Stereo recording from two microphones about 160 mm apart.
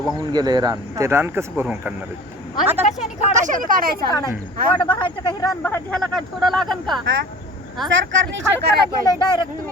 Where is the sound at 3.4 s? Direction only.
60° right (ahead or behind).